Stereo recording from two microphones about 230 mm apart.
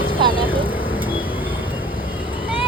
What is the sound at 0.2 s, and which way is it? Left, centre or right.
Vehicle, right.